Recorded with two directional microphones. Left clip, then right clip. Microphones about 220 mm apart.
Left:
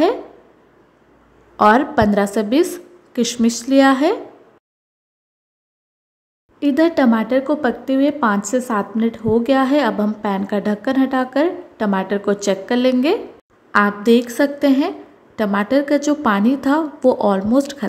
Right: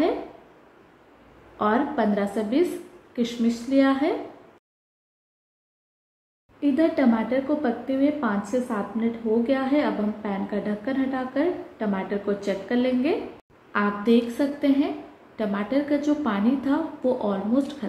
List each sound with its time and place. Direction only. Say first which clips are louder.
1.6 s a woman's voice: left 10 dB; 50° left (ahead or behind)
6.6 s a woman's voice: left 6 dB; 50° left (ahead or behind)